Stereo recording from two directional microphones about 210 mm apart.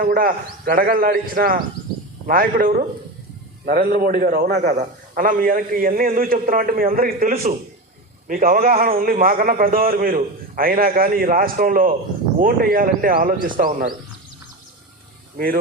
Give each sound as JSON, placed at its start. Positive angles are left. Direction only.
{"t": 0.0, "sound": "a man's voice", "side_deg": -40}
{"t": 4.5, "sound": "a man's voice", "side_deg": -35}